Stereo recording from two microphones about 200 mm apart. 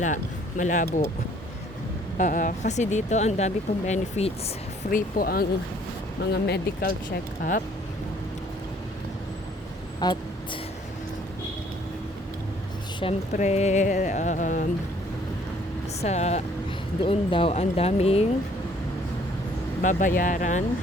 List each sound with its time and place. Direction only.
0.0 s speech: 40° left (ahead or behind)
2.1 s speech: 40° left (ahead or behind)
4.9 s speech: 45° left (ahead or behind)
10.0 s speech: 20° left (ahead or behind)
13.3 s speech: 35° left (ahead or behind)
16.0 s speech: 35° left (ahead or behind)
19.8 s speech: 40° left (ahead or behind)